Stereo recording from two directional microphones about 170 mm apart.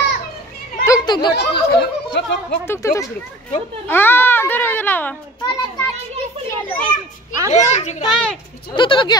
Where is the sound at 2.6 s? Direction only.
15° left (ahead or behind).